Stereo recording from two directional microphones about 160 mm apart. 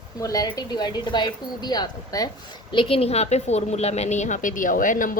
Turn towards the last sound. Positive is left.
turn(degrees=55)  # may be behind; listen again after turning